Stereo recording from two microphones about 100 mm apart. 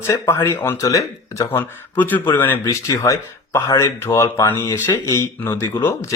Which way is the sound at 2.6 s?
30° left (ahead or behind).